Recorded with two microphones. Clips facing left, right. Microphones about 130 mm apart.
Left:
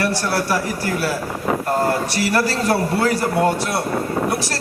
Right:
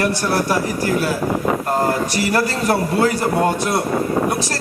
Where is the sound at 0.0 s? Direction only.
20° right (ahead or behind).